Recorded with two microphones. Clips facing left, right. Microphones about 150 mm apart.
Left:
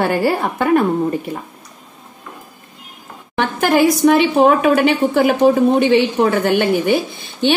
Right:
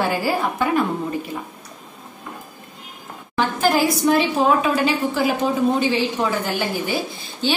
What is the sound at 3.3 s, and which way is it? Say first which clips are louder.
A woman's voice: left 4 dB; 60° left (ahead or behind).